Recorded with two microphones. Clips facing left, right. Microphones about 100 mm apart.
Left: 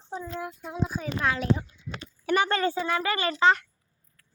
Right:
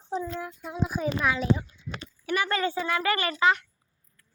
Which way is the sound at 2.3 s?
30° left (ahead or behind).